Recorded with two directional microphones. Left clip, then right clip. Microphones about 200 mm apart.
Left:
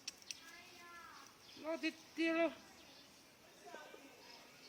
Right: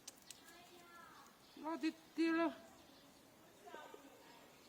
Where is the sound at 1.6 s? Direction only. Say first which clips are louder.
Left 1 dB; 60° right (ahead or behind).